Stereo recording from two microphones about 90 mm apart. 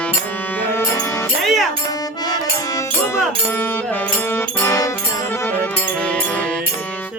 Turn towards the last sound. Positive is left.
turn(degrees=15)  # may be behind; listen again after turning